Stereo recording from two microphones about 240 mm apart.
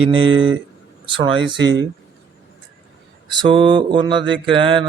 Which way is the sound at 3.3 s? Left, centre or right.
Centre.